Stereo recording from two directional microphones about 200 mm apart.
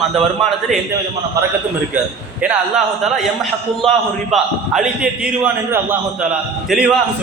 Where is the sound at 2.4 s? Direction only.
5° right (ahead or behind).